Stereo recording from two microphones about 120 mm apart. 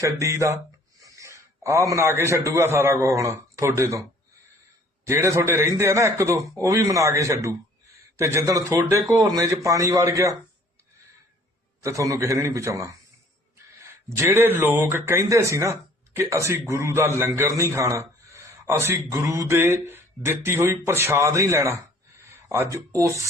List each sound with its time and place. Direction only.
0.0 s a man's voice: 25° right (ahead or behind)
5.0 s a man's voice: 25° right (ahead or behind)
11.8 s a man's voice: 25° right (ahead or behind)